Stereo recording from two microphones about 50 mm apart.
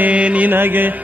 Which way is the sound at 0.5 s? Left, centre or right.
Right.